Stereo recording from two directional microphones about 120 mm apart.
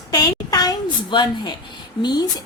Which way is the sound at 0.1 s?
30° left (ahead or behind).